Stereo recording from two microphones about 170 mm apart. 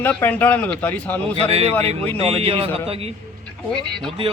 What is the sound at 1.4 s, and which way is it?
A man's voice, 35° right (ahead or behind).